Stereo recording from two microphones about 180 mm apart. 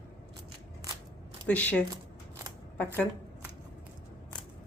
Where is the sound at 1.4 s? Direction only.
10° left (ahead or behind).